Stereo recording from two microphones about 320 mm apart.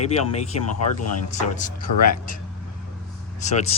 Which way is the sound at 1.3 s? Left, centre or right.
Left.